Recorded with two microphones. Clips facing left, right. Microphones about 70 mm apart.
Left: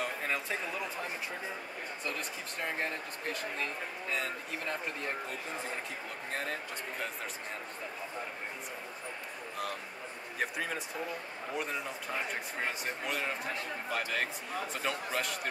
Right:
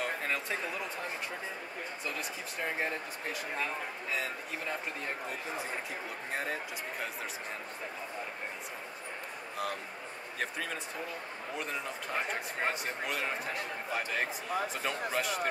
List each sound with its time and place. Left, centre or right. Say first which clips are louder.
0.0 s a sound: right 1 dB; centre
2.0 s speech: left 1 dB; centre
6.3 s speech: right 1 dB; centre
10.4 s speech: left 2 dB; centre
13.9 s speech: right 1 dB; centre